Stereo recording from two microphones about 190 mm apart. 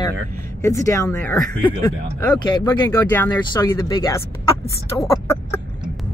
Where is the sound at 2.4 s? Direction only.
25° left (ahead or behind).